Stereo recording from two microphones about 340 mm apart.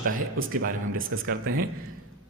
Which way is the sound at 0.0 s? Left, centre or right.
Right.